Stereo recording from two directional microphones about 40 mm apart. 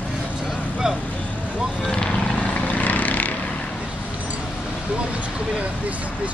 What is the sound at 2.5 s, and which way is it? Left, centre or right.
Vehicle, left.